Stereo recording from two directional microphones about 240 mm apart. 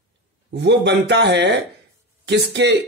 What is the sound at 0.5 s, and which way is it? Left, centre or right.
Speech, right.